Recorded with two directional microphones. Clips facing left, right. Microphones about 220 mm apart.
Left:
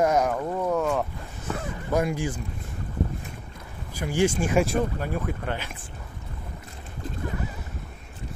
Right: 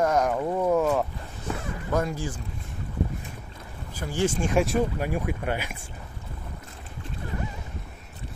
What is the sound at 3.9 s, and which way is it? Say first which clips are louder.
Speech: left 3 dB; 10° left (ahead or behind).